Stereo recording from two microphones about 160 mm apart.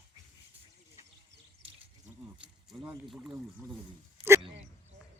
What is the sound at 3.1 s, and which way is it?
Speech, 5° right (ahead or behind).